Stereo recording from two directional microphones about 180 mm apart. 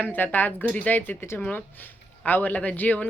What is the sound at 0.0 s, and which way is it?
Speech, 10° left (ahead or behind).